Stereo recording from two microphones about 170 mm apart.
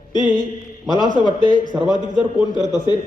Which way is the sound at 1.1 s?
25° right (ahead or behind).